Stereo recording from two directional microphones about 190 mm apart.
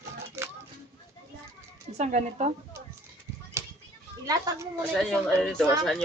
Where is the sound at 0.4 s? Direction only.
15° right (ahead or behind).